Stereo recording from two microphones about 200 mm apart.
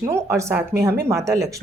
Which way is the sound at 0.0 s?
15° right (ahead or behind).